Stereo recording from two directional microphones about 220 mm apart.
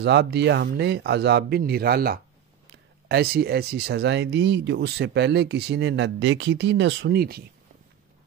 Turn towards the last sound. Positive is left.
turn(degrees=-45)  # may be behind; listen again after turning